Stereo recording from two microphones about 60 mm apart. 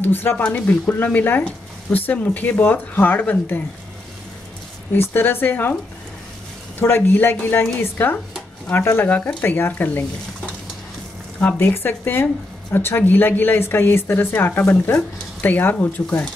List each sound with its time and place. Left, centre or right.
0.0 s speech: left
0.4 s speech: left
4.9 s speech: left
7.1 s speech: left
9.1 s speech: left
11.7 s speech: left